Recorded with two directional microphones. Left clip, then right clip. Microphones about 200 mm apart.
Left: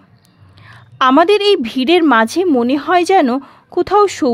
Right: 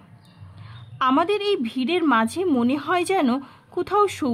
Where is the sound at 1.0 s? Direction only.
45° left (ahead or behind).